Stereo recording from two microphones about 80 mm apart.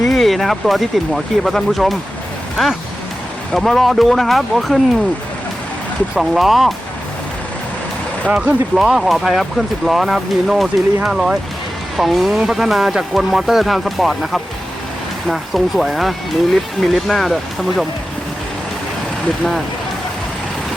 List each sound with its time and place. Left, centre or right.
0.1 s speech: centre
3.5 s speech: centre
6.1 s speech: centre
8.3 s speech: centre
8.7 s speech: centre